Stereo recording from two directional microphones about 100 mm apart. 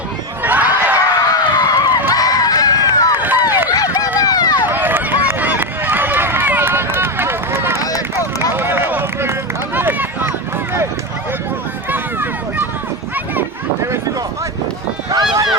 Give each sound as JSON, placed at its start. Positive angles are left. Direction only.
{"t": 0.4, "sound": "a sound", "side_deg": -15}
{"t": 1.3, "sound": "a sound", "side_deg": 35}
{"t": 3.2, "sound": "run", "side_deg": -20}
{"t": 3.7, "sound": "run", "side_deg": 40}
{"t": 4.6, "sound": "run", "side_deg": -20}
{"t": 7.8, "sound": "run", "side_deg": 35}
{"t": 8.4, "sound": "run", "side_deg": -20}
{"t": 11.9, "sound": "a sound", "side_deg": -20}
{"t": 15.1, "sound": "run", "side_deg": -50}